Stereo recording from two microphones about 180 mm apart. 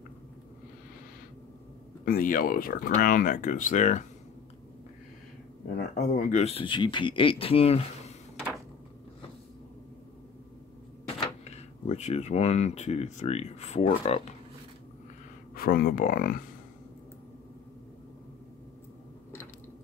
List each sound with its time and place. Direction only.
2.0 s speech: 50° left (ahead or behind)
5.9 s speech: 50° left (ahead or behind)
6.4 s speech: 30° left (ahead or behind)
11.1 s speech: 35° left (ahead or behind)
15.5 s speech: 55° left (ahead or behind)